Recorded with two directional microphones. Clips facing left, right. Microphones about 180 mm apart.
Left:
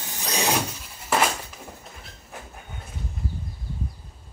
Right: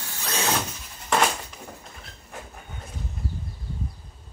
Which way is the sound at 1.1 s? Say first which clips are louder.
Even; 5° left (ahead or behind).